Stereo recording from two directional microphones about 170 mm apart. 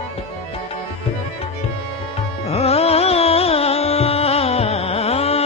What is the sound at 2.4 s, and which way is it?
Music, 35° left (ahead or behind).